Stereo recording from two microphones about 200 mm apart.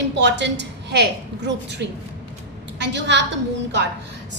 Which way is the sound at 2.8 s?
60° right (ahead or behind).